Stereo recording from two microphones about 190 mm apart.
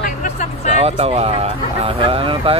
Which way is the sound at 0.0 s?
45° left (ahead or behind).